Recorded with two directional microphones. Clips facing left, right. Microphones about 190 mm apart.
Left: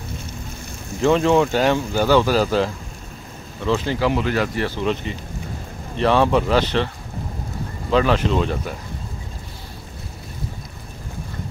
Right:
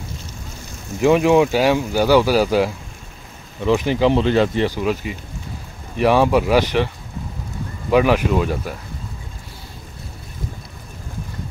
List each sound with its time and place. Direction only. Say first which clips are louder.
1.0 s speech: right 2 dB; 10° right (ahead or behind)
4.1 s speech: right 5 dB; 25° right (ahead or behind)
4.7 s speech: right 1 dB; 10° right (ahead or behind)
7.9 s speech: right 2 dB; 10° right (ahead or behind)